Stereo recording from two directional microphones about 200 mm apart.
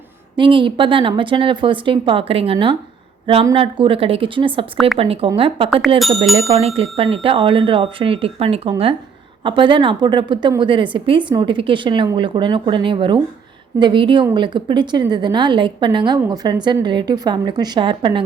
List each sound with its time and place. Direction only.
0.3 s a woman's voice: 25° right (ahead or behind)
6.0 s speech: centre (ahead or behind)
6.5 s a woman's voice: 30° right (ahead or behind)